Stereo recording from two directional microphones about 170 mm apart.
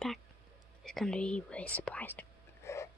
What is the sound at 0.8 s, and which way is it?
Speech, centre (ahead or behind).